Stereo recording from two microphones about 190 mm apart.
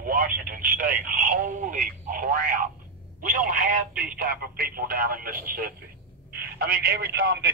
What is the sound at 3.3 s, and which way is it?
Speech, 45° right (ahead or behind).